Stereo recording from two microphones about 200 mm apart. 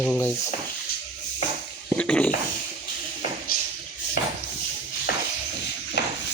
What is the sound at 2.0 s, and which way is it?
Frying, 5° left (ahead or behind).